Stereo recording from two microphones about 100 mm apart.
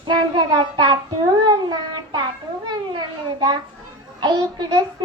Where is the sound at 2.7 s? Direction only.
45° right (ahead or behind).